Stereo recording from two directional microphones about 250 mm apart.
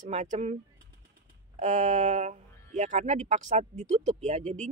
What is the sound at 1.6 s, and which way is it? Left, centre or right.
A woman's voice, right.